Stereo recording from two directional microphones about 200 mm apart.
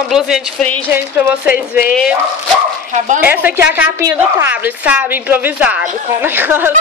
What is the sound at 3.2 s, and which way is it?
A woman's voice, 10° right (ahead or behind).